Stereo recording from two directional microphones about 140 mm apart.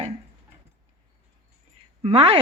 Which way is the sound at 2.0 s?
45° right (ahead or behind).